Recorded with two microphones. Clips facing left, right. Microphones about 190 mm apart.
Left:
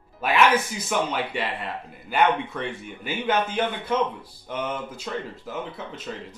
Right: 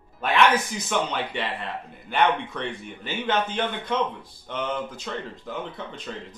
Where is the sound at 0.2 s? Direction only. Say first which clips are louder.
Even; 5° left (ahead or behind).